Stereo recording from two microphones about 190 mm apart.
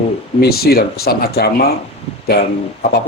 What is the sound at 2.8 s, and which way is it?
Speech, 55° left (ahead or behind).